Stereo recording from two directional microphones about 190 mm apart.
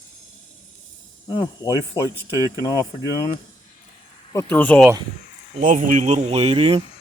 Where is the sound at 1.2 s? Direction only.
20° left (ahead or behind).